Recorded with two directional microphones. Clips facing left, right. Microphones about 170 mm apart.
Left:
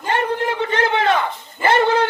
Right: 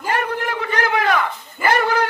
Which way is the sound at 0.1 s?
25° left (ahead or behind).